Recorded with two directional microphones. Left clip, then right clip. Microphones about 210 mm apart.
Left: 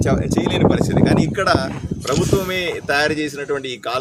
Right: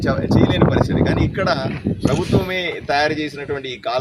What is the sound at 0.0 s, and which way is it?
Speech, 5° left (ahead or behind).